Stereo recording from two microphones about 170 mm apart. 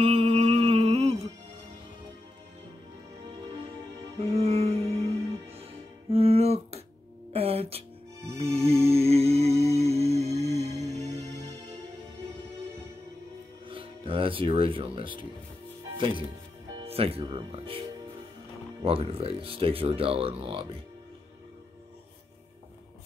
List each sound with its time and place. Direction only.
0.0 s music: 35° right (ahead or behind)
4.3 s music: 35° right (ahead or behind)
13.7 s music: 30° right (ahead or behind)
16.0 s speech: 30° right (ahead or behind)
18.9 s speech: 35° right (ahead or behind)